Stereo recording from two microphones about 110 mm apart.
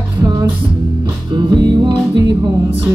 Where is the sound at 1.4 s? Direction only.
45° right (ahead or behind).